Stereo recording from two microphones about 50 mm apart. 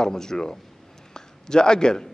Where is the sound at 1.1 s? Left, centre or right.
Centre.